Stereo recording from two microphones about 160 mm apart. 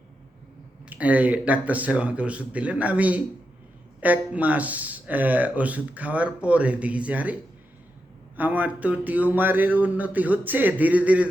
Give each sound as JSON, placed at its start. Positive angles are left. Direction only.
{"t": 0.9, "sound": "speech", "side_deg": -10}
{"t": 8.4, "sound": "speech", "side_deg": -10}